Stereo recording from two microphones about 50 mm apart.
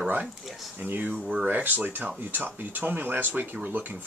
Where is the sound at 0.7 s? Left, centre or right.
Right.